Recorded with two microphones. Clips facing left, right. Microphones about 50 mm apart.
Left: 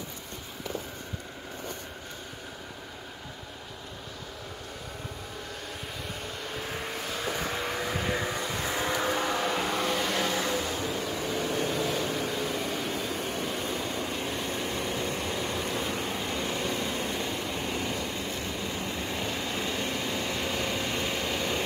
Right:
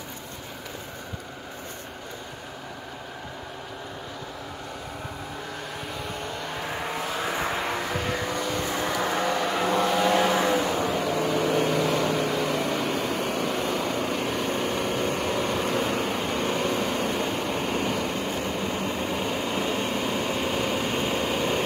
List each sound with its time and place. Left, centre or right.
6.7 s vehicle: right
9.1 s vehicle: centre
9.9 s vehicle: right
10.2 s vehicle: right
10.6 s vehicle: right
15.5 s vehicle: right
19.1 s vehicle: right